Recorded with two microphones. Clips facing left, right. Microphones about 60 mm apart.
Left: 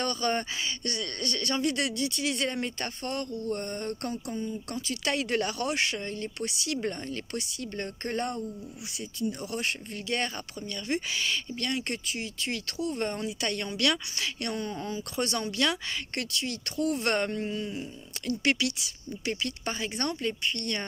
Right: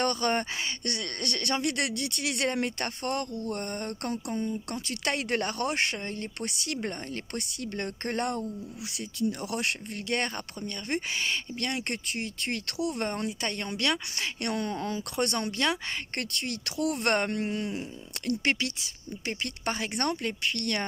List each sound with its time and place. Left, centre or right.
0.0 s speech: right
13.4 s speech: right
14.5 s speech: right
15.1 s speech: right
17.0 s speech: right
17.3 s speech: right
18.4 s speech: right
19.6 s speech: right
20.4 s speech: right